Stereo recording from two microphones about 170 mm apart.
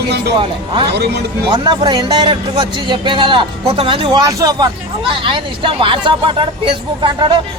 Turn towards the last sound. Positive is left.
turn(degrees=-30)  # may be behind; listen again after turning